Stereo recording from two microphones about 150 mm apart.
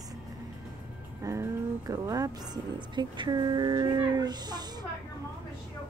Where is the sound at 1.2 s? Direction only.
20° right (ahead or behind).